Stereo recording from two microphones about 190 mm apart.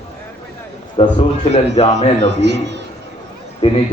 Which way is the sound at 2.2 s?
65° right (ahead or behind).